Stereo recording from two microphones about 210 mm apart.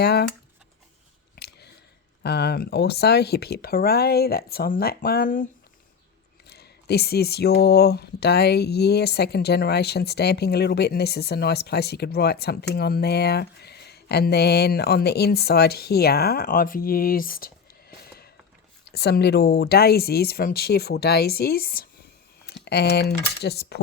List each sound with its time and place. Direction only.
0.0 s speech: 50° left (ahead or behind)
2.2 s speech: 50° left (ahead or behind)
6.5 s speech: 50° left (ahead or behind)